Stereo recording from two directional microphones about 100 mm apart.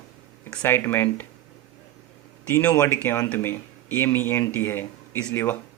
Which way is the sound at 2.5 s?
15° left (ahead or behind).